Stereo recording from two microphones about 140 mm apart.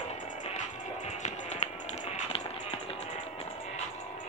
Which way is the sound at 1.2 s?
55° left (ahead or behind).